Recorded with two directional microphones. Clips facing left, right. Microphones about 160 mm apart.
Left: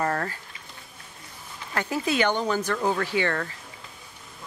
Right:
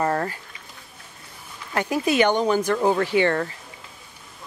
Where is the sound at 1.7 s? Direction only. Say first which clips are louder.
Right 4 dB; 15° right (ahead or behind).